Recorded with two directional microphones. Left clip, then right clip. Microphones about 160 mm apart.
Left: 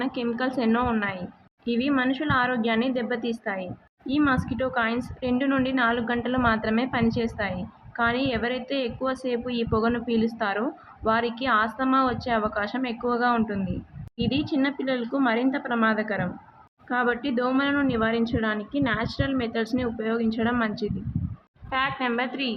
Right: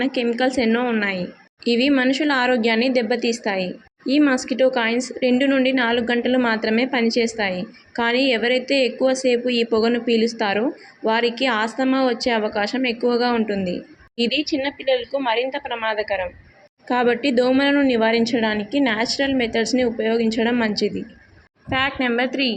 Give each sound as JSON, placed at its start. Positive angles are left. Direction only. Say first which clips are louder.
{"t": 0.0, "sound": "a woman's voice", "louder": "right 7 dB", "side_deg": -15}